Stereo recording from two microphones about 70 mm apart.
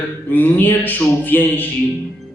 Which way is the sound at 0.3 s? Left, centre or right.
Left.